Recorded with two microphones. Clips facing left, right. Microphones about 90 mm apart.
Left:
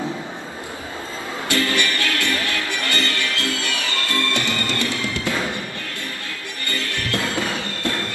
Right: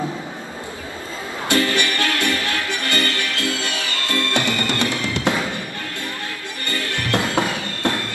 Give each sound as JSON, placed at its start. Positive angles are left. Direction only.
{"t": 1.5, "sound": "music", "side_deg": -20}
{"t": 6.7, "sound": "music", "side_deg": -20}